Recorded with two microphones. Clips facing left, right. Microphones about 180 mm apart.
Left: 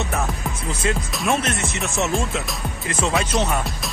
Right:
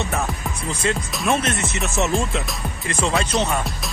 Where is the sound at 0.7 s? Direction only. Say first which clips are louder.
Right 1 dB; 5° left (ahead or behind).